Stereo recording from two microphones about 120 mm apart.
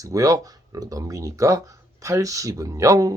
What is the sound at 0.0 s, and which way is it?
Speech, 30° right (ahead or behind).